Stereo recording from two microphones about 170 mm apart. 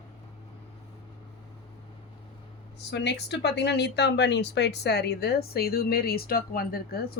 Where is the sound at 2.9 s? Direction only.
85° left.